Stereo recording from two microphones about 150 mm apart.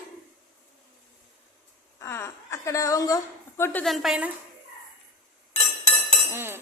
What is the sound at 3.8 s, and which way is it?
Speech, centre (ahead or behind).